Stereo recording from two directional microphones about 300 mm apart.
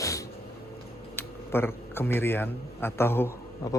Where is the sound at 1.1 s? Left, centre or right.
Centre.